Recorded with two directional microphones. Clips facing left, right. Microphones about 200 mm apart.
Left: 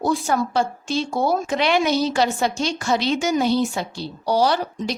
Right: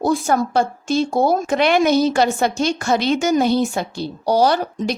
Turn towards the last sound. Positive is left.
turn(degrees=-50)  # may be behind; listen again after turning